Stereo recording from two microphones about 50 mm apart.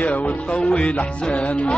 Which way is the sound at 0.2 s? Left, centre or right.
Centre.